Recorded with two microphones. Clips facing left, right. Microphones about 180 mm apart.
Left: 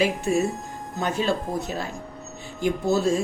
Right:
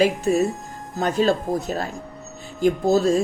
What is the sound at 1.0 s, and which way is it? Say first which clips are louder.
Speech: right 5 dB; 35° right (ahead or behind).